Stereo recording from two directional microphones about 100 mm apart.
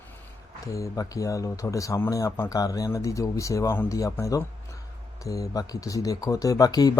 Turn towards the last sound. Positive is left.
turn(degrees=40)  # may be behind; listen again after turning